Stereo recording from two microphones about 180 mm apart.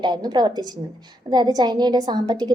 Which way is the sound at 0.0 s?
20° right (ahead or behind).